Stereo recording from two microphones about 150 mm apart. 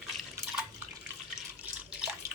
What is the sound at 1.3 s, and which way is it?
Water, 5° right (ahead or behind).